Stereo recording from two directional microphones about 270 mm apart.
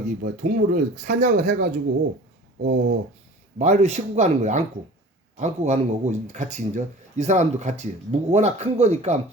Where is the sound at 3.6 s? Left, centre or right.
Right.